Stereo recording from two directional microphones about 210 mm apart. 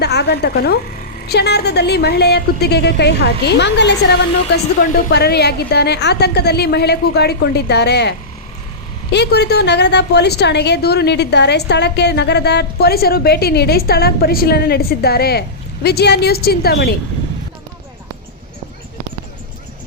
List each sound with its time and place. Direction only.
0.0 s a woman's voice: 50° left (ahead or behind)
9.1 s a woman's voice: 50° left (ahead or behind)